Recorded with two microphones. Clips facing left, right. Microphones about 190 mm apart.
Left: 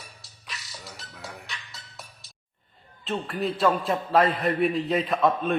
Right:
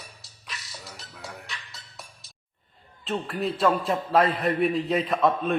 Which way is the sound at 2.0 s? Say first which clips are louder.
Even; centre (ahead or behind).